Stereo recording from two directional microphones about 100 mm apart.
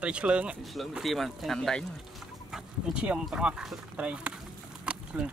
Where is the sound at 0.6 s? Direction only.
Centre (ahead or behind).